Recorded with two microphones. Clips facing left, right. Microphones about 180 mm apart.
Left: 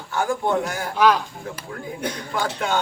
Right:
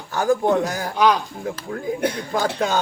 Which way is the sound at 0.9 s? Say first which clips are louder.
Even; 15° right (ahead or behind).